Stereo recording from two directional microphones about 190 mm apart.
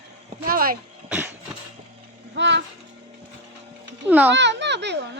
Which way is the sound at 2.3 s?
70° right (ahead or behind).